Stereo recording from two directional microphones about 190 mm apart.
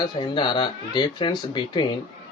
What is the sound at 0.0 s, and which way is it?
Speech, 25° left (ahead or behind).